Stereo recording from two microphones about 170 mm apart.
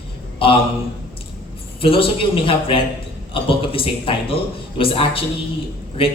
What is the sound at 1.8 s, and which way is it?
A man's voice, 35° left (ahead or behind).